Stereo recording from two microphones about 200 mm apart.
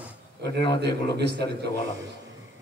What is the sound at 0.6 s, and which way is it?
Speech, 55° right (ahead or behind).